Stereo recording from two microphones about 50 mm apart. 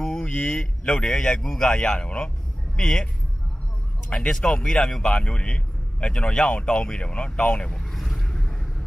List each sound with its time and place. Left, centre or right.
0.0 s speech: centre
4.1 s speech: centre
5.0 s a man's voice: left
7.8 s vehicle: centre